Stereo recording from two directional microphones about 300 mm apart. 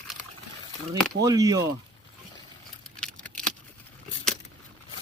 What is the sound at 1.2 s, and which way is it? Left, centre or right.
Speech, centre.